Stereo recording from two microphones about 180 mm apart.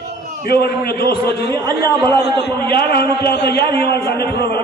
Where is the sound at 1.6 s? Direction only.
20° right (ahead or behind).